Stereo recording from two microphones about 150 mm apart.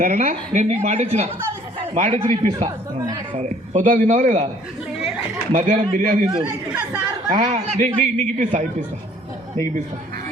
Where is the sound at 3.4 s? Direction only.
60° right (ahead or behind).